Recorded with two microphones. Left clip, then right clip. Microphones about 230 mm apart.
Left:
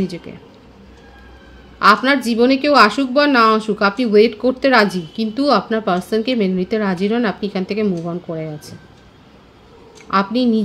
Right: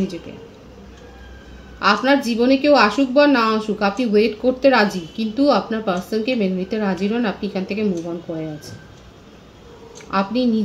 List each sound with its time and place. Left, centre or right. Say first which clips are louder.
1.8 s a woman's voice: left 4 dB; left
10.1 s a woman's voice: left 3 dB; left